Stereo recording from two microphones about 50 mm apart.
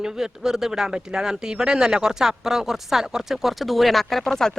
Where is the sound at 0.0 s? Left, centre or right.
Centre.